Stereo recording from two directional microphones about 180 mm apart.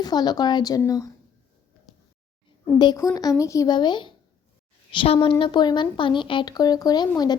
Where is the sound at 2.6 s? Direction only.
20° left (ahead or behind).